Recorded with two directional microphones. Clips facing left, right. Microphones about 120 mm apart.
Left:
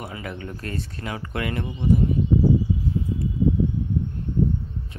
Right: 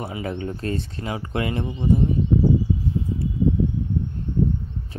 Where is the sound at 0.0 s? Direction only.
30° right (ahead or behind).